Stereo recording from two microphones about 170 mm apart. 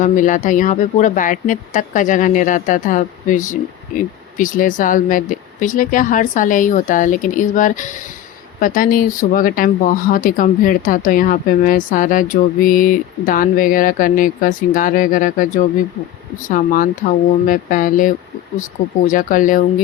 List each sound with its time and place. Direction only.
0.0 s speech: 50° left (ahead or behind)